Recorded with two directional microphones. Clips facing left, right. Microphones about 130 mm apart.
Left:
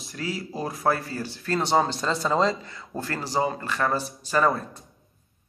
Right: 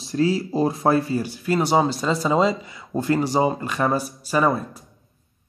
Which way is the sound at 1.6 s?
5° right (ahead or behind).